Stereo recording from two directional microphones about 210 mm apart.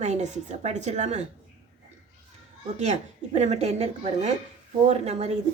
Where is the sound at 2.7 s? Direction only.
30° right (ahead or behind).